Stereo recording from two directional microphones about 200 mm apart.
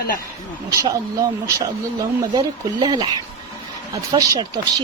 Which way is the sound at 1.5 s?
20° right (ahead or behind).